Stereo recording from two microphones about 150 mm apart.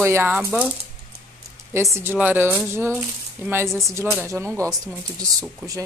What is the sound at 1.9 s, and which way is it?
A woman's voice, 15° right (ahead or behind).